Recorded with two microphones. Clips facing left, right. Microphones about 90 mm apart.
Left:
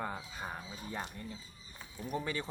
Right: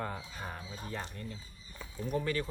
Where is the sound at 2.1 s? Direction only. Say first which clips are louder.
Right 4 dB; 20° left (ahead or behind).